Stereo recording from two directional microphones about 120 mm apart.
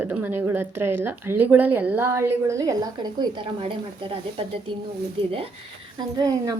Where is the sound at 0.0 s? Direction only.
15° right (ahead or behind); by 3.4 s 35° right (ahead or behind).